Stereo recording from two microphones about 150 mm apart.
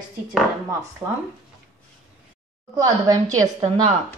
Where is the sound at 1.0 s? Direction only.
20° right (ahead or behind).